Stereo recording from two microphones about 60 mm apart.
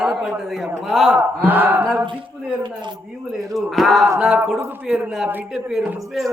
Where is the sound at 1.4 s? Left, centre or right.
Right.